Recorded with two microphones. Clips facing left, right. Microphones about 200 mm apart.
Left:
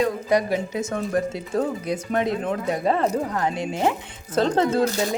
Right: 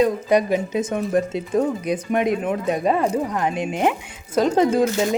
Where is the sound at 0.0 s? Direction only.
20° right (ahead or behind).